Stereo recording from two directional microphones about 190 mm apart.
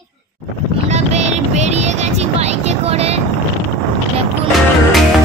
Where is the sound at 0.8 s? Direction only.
35° right (ahead or behind).